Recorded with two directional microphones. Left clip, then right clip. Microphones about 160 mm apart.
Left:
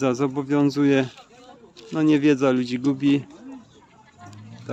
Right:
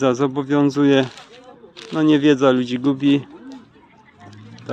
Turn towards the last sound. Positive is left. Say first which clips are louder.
# right 4 dB
turn(degrees=15)  # may be behind; listen again after turning